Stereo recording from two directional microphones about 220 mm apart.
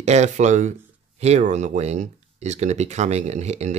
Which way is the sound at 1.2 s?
30° right (ahead or behind).